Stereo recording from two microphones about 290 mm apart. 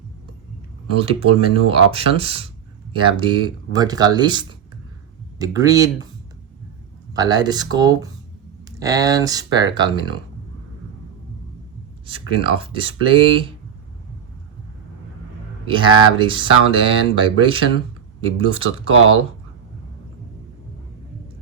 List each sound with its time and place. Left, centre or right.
0.9 s speech: centre
7.1 s speech: centre
12.0 s speech: centre
15.6 s speech: centre